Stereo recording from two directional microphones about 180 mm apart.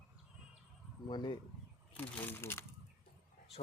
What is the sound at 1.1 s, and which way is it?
Speech, 25° left (ahead or behind).